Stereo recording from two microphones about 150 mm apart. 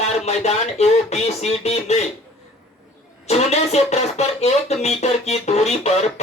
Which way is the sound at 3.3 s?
45° left (ahead or behind).